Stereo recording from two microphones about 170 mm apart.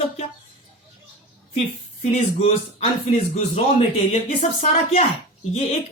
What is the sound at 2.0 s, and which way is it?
Speech, 35° left (ahead or behind).